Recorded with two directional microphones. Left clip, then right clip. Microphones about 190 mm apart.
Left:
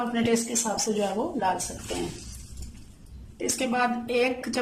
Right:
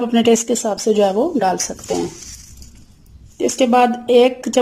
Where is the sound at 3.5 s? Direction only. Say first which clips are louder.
Right 12 dB; 45° right (ahead or behind).